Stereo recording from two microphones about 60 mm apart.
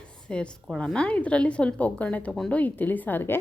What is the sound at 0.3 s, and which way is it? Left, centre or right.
A woman's voice, centre.